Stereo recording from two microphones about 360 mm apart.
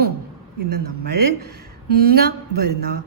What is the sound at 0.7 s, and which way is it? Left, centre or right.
Speech, right.